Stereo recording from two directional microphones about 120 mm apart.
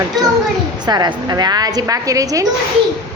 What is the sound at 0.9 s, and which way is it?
A woman's voice, 35° right (ahead or behind).